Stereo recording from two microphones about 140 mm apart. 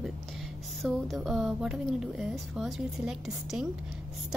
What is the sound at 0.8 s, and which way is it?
A woman's voice, centre (ahead or behind).